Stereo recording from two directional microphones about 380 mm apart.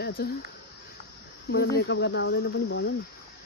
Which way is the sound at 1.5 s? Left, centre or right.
Left.